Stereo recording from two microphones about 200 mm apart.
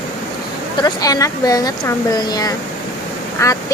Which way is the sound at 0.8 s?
20° left (ahead or behind).